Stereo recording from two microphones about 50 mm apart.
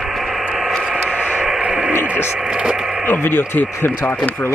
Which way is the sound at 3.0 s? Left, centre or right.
Left.